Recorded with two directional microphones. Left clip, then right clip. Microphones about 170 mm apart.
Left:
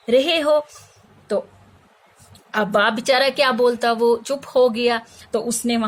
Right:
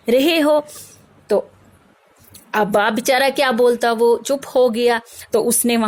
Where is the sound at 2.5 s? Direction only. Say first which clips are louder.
Right 2 dB; 45° right (ahead or behind).